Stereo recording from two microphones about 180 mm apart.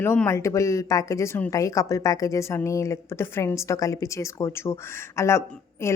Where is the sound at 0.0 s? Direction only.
10° left (ahead or behind).